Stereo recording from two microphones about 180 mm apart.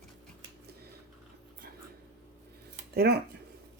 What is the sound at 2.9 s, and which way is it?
Speech, 60° right (ahead or behind).